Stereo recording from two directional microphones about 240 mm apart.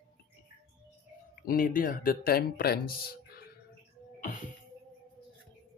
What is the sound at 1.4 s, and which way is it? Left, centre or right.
Speech, left.